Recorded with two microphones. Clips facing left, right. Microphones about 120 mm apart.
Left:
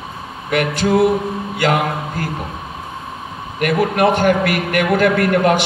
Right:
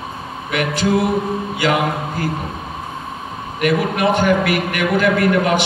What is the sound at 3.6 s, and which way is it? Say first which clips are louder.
A man's voice: left 2 dB; 50° left (ahead or behind).